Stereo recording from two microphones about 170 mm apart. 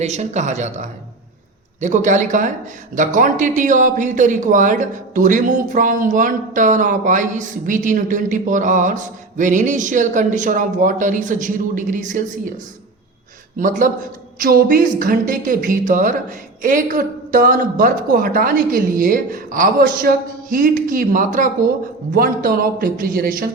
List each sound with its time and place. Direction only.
0.0 s speech: 40° right (ahead or behind)
13.6 s speech: 50° right (ahead or behind)